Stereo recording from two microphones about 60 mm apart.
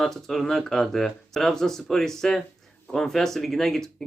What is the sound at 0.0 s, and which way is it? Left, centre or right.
Speech, centre.